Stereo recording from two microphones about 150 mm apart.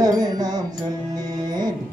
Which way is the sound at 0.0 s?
25° right (ahead or behind).